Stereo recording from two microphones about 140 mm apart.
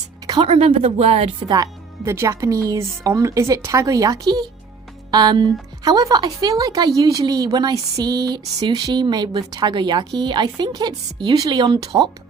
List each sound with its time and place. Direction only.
0.3 s a woman's voice: 40° right (ahead or behind)
1.5 s a woman's voice: 25° right (ahead or behind)